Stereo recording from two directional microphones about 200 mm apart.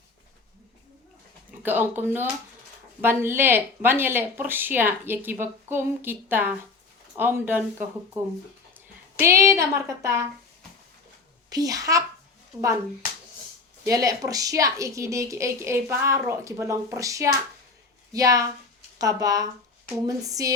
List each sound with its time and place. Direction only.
1.6 s speech: 10° right (ahead or behind)
11.4 s speech: 20° right (ahead or behind)
13.8 s speech: 15° right (ahead or behind)